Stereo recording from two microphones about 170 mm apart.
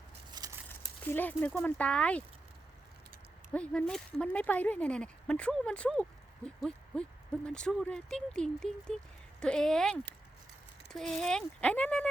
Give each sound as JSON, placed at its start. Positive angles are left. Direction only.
{"t": 0.3, "sound": "a sound", "side_deg": -25}
{"t": 0.7, "sound": "speech", "side_deg": 10}
{"t": 3.5, "sound": "speech", "side_deg": 5}